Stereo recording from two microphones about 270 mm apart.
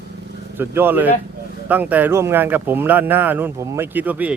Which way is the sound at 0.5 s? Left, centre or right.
Centre.